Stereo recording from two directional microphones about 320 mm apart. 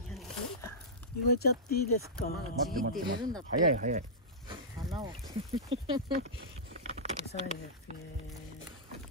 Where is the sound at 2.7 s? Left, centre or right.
Right.